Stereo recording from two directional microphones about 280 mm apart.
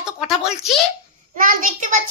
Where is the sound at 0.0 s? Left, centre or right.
Centre.